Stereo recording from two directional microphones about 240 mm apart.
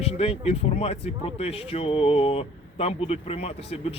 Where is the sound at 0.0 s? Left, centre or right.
Left.